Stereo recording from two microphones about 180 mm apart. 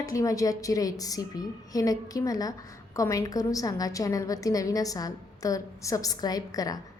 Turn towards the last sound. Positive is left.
turn(degrees=20)  # may be behind; listen again after turning